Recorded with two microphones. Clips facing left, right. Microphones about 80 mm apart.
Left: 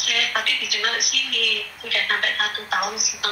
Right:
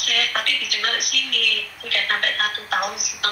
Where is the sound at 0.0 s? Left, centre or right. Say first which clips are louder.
Even; right.